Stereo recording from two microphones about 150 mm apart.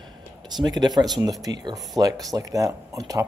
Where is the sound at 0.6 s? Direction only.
30° right (ahead or behind).